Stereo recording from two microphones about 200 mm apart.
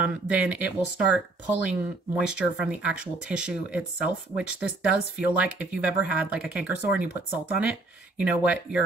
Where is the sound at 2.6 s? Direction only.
5° right (ahead or behind).